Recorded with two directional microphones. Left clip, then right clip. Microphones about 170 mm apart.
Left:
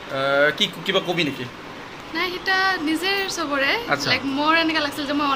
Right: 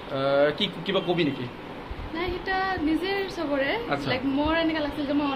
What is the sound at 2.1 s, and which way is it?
A man's voice, 10° right (ahead or behind).